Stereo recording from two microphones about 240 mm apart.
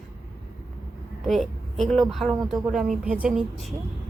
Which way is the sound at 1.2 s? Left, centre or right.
Centre.